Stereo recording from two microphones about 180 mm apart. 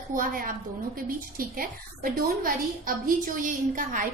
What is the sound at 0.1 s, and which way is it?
A woman's voice, 50° right (ahead or behind).